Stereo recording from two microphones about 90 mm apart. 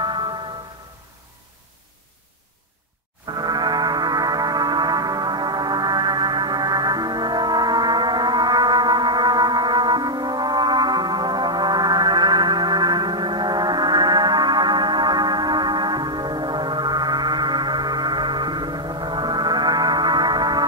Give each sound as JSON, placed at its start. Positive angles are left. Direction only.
{"t": 3.3, "sound": "music", "side_deg": -50}